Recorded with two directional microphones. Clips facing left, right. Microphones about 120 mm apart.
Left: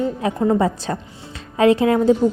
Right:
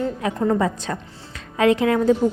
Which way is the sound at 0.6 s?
30° left (ahead or behind).